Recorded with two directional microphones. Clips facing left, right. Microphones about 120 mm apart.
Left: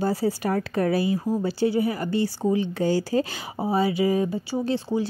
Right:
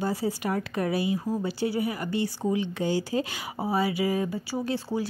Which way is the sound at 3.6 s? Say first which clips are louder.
Left 4 dB; 25° left (ahead or behind).